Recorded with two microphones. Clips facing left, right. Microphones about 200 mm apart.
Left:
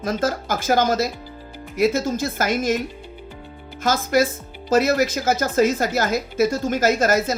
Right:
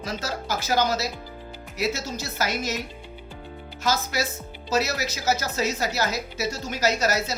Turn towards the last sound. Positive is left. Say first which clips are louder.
# left 6 dB
turn(degrees=50)  # may be behind; listen again after turning